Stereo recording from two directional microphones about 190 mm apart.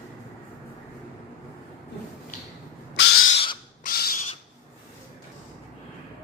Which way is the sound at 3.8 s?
55° left (ahead or behind).